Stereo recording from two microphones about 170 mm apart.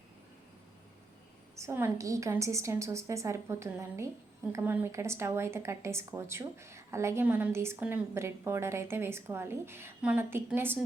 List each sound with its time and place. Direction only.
1.5 s speech: 15° right (ahead or behind)